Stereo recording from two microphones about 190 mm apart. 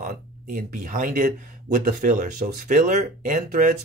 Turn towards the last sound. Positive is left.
turn(degrees=-45)  # may be behind; listen again after turning